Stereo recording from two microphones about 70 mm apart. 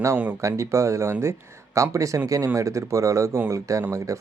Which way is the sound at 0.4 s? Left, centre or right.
Right.